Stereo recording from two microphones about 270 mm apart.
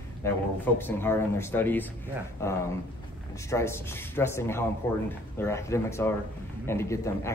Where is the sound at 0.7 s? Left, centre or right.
Centre.